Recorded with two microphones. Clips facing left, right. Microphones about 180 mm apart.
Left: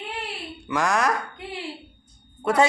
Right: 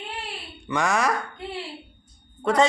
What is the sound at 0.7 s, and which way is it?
Speech, centre (ahead or behind).